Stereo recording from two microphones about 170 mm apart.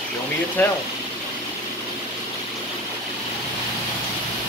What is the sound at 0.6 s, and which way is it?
Speech, 10° left (ahead or behind).